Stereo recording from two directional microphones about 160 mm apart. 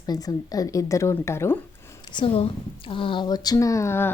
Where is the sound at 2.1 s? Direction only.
35° left (ahead or behind).